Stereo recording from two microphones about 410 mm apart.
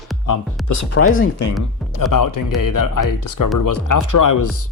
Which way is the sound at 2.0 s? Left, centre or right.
Left.